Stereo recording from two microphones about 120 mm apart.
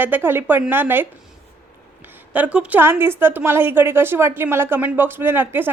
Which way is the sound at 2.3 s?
10° right (ahead or behind).